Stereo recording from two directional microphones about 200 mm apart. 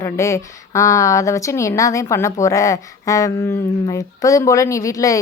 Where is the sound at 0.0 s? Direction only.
15° left (ahead or behind).